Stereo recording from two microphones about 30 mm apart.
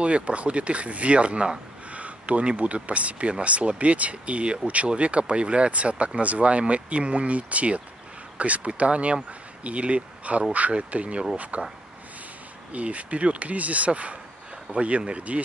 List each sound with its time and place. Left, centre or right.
0.0 s speech: right
1.9 s a sound: right
2.4 s speech: right
12.7 s speech: right